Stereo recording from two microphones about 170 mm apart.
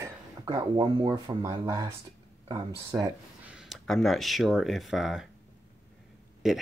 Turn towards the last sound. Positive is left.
turn(degrees=-5)  # may be behind; listen again after turning